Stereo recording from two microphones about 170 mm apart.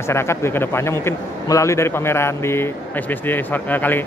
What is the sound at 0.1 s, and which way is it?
A man's voice, 15° left (ahead or behind).